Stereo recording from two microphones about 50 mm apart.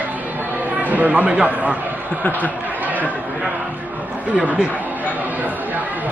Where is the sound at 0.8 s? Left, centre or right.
Right.